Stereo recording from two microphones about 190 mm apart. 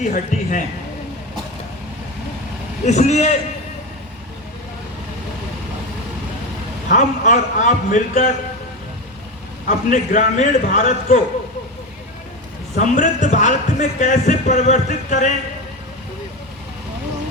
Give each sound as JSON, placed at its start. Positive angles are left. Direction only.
{"t": 0.0, "sound": "a man's voice", "side_deg": 40}
{"t": 2.8, "sound": "a man's voice", "side_deg": 35}
{"t": 6.8, "sound": "a man's voice", "side_deg": 40}
{"t": 9.6, "sound": "a man's voice", "side_deg": 40}
{"t": 12.7, "sound": "a man's voice", "side_deg": 40}